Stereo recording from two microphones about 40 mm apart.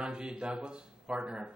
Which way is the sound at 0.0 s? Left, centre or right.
Centre.